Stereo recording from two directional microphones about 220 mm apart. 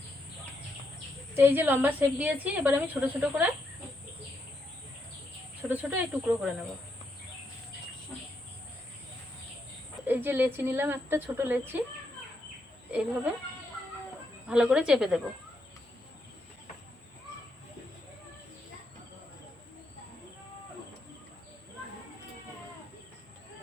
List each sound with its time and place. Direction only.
1.3 s a woman's voice: 10° right (ahead or behind)
5.6 s a woman's voice: 5° right (ahead or behind)
10.1 s a woman's voice: 10° right (ahead or behind)
12.9 s a woman's voice: 5° right (ahead or behind)
14.4 s a woman's voice: 5° right (ahead or behind)